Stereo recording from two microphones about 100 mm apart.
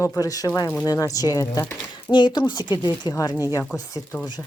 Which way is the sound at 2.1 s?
50° left (ahead or behind).